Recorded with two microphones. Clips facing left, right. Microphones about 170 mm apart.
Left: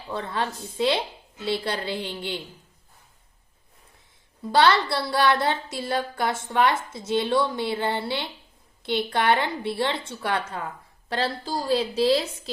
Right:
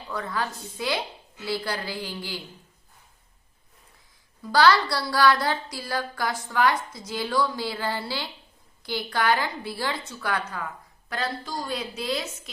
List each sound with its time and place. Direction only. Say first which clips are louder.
0.1 s speech: left 2 dB; 25° left (ahead or behind)
4.4 s a woman's voice: even; 25° left (ahead or behind)